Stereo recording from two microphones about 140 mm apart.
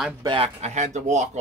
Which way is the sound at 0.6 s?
55° right (ahead or behind).